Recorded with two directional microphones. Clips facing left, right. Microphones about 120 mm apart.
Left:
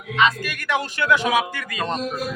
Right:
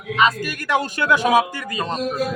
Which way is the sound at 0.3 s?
40° right (ahead or behind).